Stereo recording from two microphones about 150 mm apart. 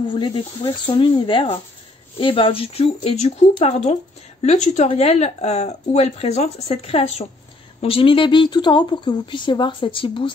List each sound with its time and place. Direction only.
0.1 s speech: 35° left (ahead or behind)